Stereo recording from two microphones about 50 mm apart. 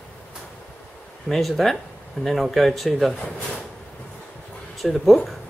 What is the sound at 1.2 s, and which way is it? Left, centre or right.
Speech, centre.